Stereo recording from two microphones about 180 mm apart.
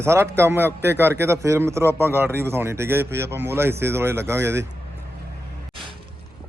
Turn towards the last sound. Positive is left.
turn(degrees=-15)  # may be behind; listen again after turning